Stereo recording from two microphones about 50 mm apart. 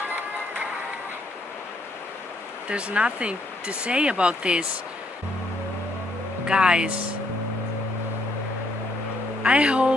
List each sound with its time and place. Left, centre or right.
0.0 s music: right
2.7 s speech: right
6.4 s speech: centre
9.4 s speech: right